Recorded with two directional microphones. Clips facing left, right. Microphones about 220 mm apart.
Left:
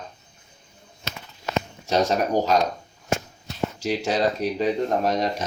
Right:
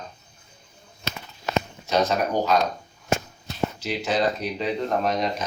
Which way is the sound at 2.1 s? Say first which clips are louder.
Left 1 dB; 40° left (ahead or behind).